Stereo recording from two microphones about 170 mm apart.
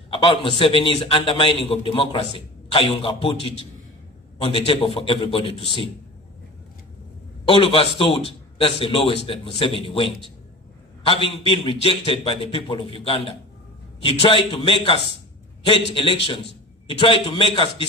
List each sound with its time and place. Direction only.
0.1 s a man's voice: 30° left (ahead or behind)
7.4 s a man's voice: 30° left (ahead or behind)